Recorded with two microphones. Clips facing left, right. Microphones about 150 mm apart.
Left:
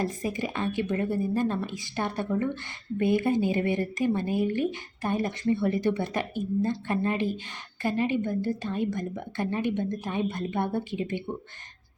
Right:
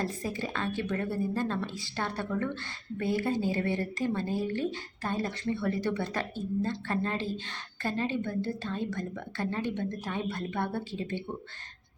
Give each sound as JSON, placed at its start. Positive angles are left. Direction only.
{"t": 0.0, "sound": "speech", "side_deg": 15}